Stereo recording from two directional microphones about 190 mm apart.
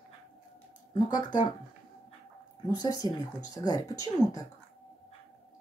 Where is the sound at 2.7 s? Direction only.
20° left (ahead or behind).